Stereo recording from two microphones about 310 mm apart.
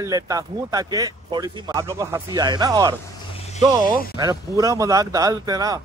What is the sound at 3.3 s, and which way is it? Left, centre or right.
Vehicle, centre.